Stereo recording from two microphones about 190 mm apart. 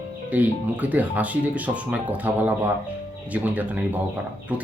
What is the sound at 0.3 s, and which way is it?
Speech, 5° right (ahead or behind).